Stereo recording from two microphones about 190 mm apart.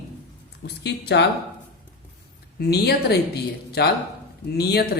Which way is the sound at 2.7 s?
60° left (ahead or behind).